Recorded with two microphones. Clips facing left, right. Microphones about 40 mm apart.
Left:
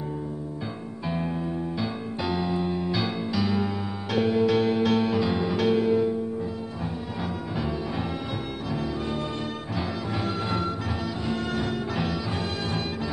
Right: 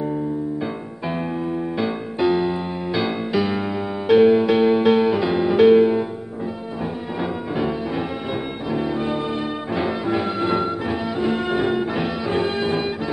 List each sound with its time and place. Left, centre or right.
1.8 s music: right
7.2 s music: right
8.7 s music: right